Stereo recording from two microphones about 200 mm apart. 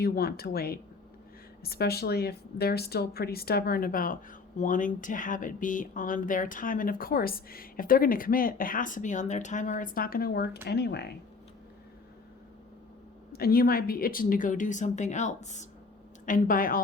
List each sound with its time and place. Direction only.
0.0 s a woman's voice: 50° left (ahead or behind)
13.3 s a woman's voice: 50° left (ahead or behind)